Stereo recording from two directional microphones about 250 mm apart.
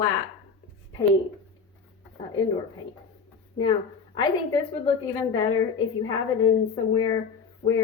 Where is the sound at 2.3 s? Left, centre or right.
Centre.